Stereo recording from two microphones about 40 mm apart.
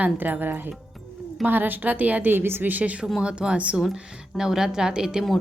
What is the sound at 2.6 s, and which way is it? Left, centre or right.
Speech, right.